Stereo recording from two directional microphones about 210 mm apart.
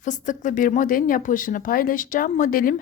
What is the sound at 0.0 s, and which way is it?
A woman's voice, 35° left (ahead or behind).